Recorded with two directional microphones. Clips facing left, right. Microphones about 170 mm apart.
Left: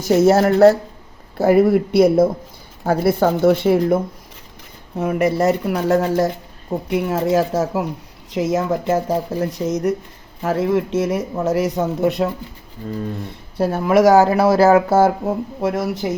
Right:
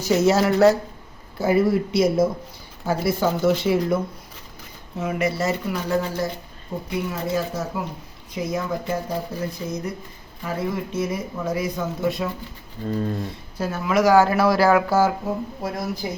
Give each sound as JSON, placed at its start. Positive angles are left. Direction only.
{"t": 0.3, "sound": "speech", "side_deg": 55}
{"t": 1.4, "sound": "speech", "side_deg": 65}
{"t": 11.4, "sound": "speech", "side_deg": 80}
{"t": 13.6, "sound": "speech", "side_deg": 55}
{"t": 14.3, "sound": "speech", "side_deg": 20}
{"t": 15.0, "sound": "speech", "side_deg": 70}